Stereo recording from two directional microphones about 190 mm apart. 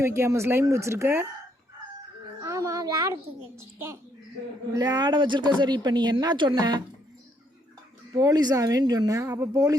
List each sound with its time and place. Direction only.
0.0 s speech: 15° right (ahead or behind)
2.4 s a sound: 15° right (ahead or behind)
3.6 s a woman's voice: 15° right (ahead or behind)
8.1 s a woman's voice: 20° right (ahead or behind)